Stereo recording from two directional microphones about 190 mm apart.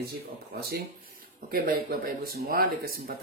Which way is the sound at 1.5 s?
50° right (ahead or behind).